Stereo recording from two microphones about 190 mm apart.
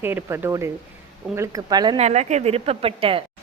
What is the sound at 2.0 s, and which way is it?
Speech, 35° right (ahead or behind).